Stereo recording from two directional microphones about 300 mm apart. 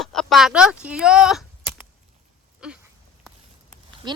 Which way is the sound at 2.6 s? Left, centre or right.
Centre.